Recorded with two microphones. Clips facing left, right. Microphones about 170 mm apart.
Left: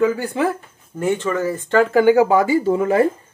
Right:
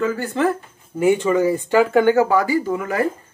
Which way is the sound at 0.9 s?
10° right (ahead or behind).